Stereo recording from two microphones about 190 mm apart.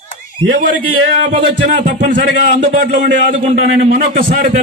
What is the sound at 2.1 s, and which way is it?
A man's voice, 45° right (ahead or behind).